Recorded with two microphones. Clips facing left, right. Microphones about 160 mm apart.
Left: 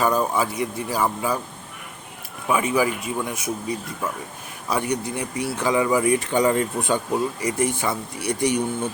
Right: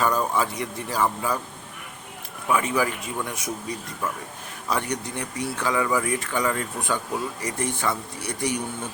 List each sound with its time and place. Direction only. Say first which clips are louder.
0.0 s speech: left 2 dB; 10° left (ahead or behind)
2.5 s speech: left 3 dB; 10° left (ahead or behind)
4.7 s speech: left 3 dB; 10° left (ahead or behind)
7.4 s speech: left 4 dB; 10° left (ahead or behind)